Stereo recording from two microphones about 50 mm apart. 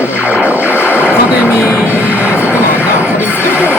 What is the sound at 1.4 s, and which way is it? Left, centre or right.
Speech, left.